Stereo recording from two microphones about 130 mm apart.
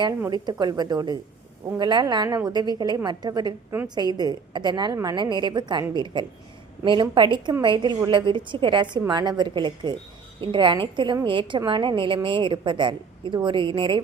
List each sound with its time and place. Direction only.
0.3 s a woman's voice: 30° right (ahead or behind)